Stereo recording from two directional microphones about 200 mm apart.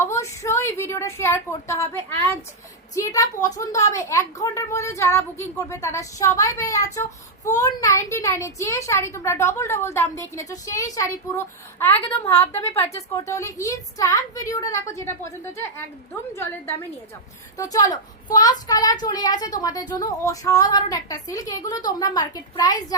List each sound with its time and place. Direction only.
0.0 s a woman's voice: 15° left (ahead or behind)